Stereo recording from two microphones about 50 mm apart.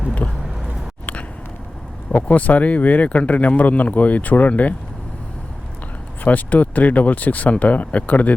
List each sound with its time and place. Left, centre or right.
0.2 s speech: left
2.2 s speech: left
6.2 s speech: left